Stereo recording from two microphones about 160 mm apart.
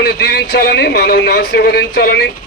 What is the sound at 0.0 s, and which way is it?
A man's voice, 90° left.